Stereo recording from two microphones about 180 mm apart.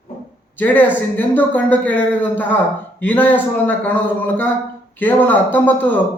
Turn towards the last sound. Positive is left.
turn(degrees=10)  # may be behind; listen again after turning